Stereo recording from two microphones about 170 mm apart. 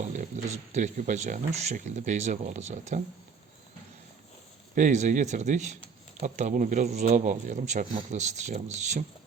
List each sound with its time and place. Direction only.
0.2 s speech: 45° right (ahead or behind)
4.7 s speech: 50° right (ahead or behind)